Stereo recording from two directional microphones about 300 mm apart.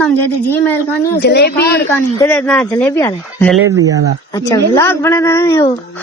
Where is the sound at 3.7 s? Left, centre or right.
Centre.